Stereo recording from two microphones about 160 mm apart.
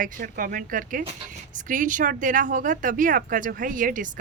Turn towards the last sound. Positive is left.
turn(degrees=-55)  # may be behind; listen again after turning